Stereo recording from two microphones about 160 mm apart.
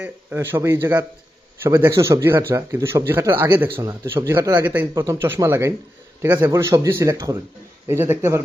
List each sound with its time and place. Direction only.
0.0 s a man's voice: 10° right (ahead or behind)